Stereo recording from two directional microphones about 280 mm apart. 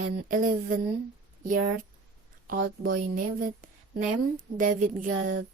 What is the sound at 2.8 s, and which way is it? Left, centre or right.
A woman's voice, right.